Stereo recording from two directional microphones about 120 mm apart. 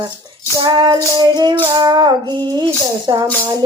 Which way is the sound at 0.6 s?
40° right (ahead or behind).